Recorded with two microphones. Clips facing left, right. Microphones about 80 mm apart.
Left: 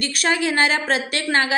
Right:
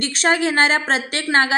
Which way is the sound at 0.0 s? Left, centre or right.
Right.